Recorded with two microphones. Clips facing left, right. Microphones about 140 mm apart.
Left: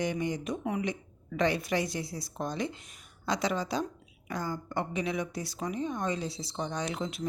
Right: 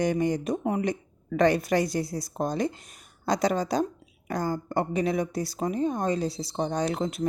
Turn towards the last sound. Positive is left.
turn(degrees=-45)  # may be behind; listen again after turning